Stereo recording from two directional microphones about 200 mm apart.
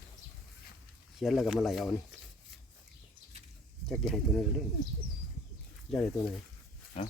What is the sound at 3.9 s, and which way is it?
Speech, centre (ahead or behind).